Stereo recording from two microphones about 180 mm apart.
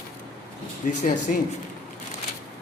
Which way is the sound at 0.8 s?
45° left (ahead or behind).